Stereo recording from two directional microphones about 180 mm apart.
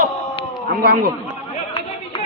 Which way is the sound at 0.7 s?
55° right (ahead or behind).